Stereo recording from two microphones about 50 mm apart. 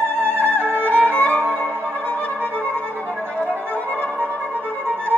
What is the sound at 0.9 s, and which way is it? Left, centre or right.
Violin, left.